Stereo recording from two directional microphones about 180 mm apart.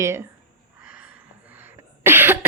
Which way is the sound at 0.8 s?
10° right (ahead or behind).